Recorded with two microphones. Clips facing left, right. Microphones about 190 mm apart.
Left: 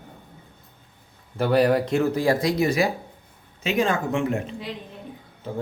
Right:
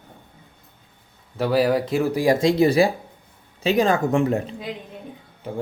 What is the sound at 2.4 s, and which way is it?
Speech, 30° right (ahead or behind).